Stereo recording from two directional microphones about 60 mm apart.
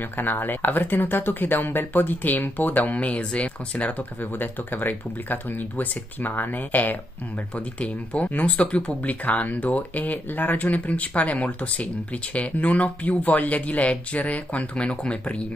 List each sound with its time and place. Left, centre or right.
0.2 s speech: left